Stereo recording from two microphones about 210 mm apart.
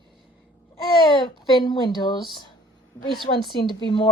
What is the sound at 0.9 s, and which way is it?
Speech, 25° left (ahead or behind).